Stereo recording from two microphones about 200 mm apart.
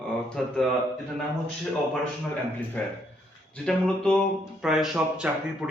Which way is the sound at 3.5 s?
5° left (ahead or behind).